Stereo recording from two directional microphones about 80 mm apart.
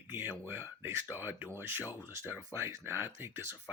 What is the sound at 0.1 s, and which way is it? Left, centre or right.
Speech, right.